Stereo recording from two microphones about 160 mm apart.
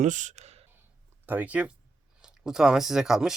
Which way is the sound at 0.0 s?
50° right (ahead or behind).